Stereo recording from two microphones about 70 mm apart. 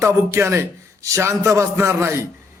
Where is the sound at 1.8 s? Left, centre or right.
Right.